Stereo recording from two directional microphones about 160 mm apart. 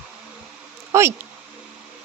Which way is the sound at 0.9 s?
15° right (ahead or behind).